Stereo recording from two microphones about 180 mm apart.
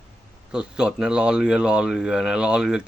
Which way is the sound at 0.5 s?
5° right (ahead or behind).